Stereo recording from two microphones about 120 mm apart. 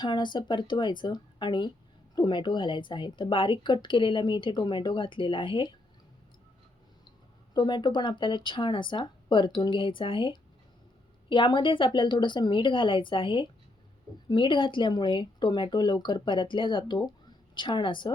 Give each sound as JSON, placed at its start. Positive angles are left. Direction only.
{"t": 0.0, "sound": "a woman's voice", "side_deg": 40}
{"t": 7.5, "sound": "a woman's voice", "side_deg": 35}